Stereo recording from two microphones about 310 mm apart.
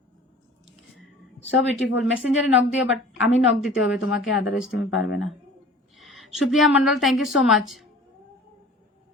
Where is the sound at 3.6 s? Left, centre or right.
Centre.